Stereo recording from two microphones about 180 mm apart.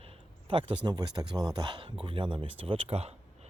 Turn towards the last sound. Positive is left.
turn(degrees=-35)  # may be behind; listen again after turning